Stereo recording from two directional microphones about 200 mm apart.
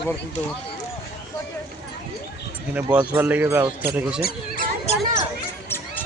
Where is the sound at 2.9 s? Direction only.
10° right (ahead or behind).